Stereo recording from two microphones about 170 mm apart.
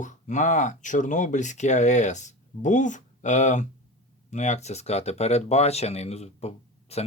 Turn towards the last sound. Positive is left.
turn(degrees=40)  # may be behind; listen again after turning